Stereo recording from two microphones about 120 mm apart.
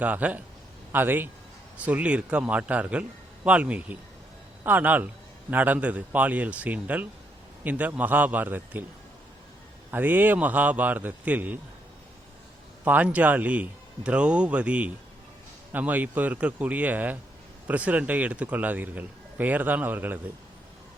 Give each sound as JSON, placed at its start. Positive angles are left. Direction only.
{"t": 0.0, "sound": "a man's voice", "side_deg": -10}
{"t": 9.9, "sound": "a man's voice", "side_deg": -15}
{"t": 12.8, "sound": "a man's voice", "side_deg": -15}